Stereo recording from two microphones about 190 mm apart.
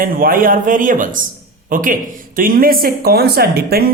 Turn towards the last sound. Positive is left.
turn(degrees=-55)  # may be behind; listen again after turning